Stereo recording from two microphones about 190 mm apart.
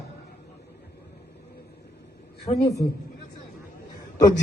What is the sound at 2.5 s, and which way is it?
Speech, 35° left (ahead or behind).